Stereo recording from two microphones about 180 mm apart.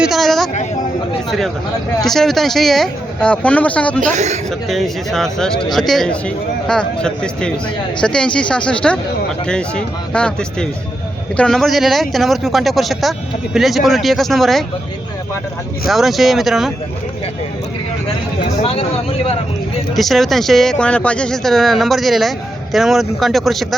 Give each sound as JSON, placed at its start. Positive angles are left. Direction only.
{"t": 0.0, "sound": "a sound", "side_deg": 0}
{"t": 2.0, "sound": "speech", "side_deg": 0}
{"t": 4.0, "sound": "a woman's voice", "side_deg": -40}
{"t": 4.7, "sound": "speech", "side_deg": 0}
{"t": 15.9, "sound": "speech", "side_deg": 0}
{"t": 18.5, "sound": "speech", "side_deg": 30}
{"t": 20.0, "sound": "speech", "side_deg": 0}